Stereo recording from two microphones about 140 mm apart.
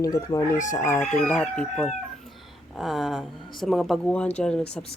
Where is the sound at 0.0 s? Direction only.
25° left (ahead or behind).